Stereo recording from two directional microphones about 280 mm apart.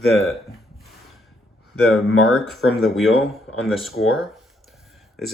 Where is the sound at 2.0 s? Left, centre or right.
Left.